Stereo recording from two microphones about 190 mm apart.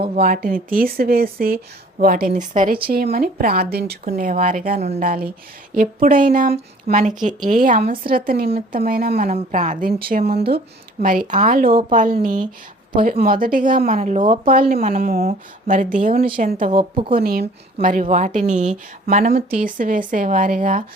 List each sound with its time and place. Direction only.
0.2 s speech: 50° right (ahead or behind)
4.1 s speech: 45° right (ahead or behind)
14.0 s a woman's voice: 30° right (ahead or behind)
14.4 s speech: 50° right (ahead or behind)
16.7 s a woman's voice: 25° right (ahead or behind)
17.2 s speech: 50° right (ahead or behind)
17.4 s a woman's voice: 35° right (ahead or behind)